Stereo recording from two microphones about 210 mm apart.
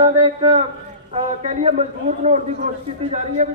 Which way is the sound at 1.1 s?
35° right (ahead or behind).